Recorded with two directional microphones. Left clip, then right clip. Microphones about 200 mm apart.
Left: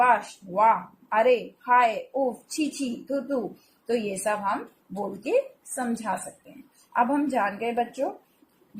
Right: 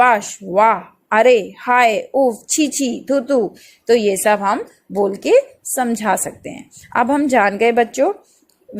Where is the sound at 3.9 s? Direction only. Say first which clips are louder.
Right 13 dB; 35° right (ahead or behind).